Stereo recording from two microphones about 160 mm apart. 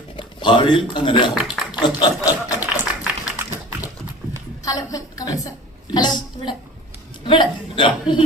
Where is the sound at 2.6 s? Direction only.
15° right (ahead or behind).